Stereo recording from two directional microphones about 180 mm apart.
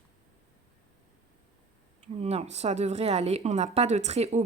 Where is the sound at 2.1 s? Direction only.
35° right (ahead or behind).